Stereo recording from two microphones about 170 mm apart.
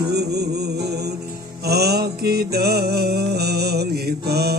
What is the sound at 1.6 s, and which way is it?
Mantra, 70° right (ahead or behind).